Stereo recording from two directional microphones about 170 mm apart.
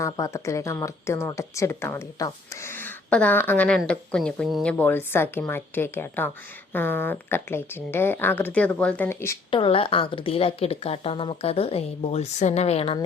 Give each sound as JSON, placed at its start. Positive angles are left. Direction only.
{"t": 0.0, "sound": "speech", "side_deg": 20}
{"t": 4.8, "sound": "speech", "side_deg": 10}
{"t": 9.5, "sound": "a woman's voice", "side_deg": 30}